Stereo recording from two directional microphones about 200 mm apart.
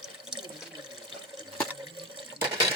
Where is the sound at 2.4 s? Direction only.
25° right (ahead or behind).